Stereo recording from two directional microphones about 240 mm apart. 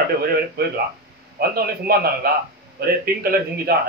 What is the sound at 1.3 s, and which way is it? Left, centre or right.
A man's voice, right.